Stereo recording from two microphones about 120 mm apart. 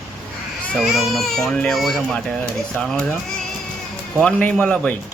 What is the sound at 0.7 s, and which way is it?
Speech, centre (ahead or behind).